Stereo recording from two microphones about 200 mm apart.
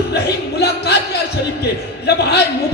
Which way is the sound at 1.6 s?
55° left (ahead or behind).